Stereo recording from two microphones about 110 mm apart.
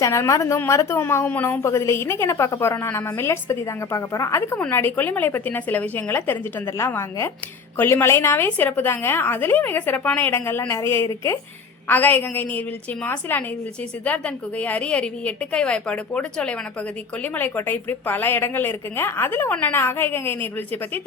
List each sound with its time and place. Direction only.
0.0 s a woman's voice: 25° left (ahead or behind)